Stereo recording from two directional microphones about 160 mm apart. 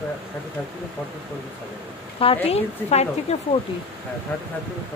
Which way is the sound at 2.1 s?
35° left (ahead or behind).